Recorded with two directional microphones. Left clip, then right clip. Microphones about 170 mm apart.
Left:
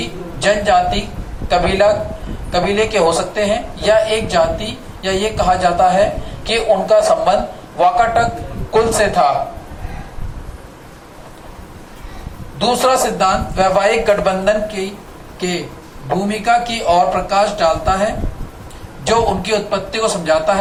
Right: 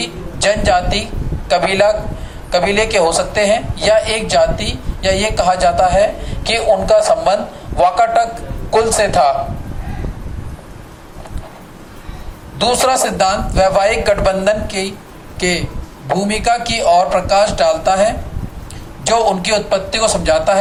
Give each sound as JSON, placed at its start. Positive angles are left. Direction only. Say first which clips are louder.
{"t": 0.3, "sound": "a man's voice", "louder": "even", "side_deg": -50}
{"t": 12.5, "sound": "a man's voice", "louder": "even", "side_deg": -50}
{"t": 16.0, "sound": "a man's voice", "louder": "right 1 dB", "side_deg": -50}